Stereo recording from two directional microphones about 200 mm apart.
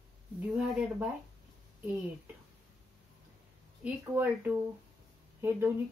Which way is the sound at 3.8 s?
5° right (ahead or behind).